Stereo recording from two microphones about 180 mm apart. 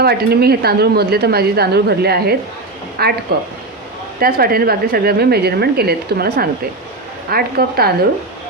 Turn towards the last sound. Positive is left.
turn(degrees=-60)  # may be behind; listen again after turning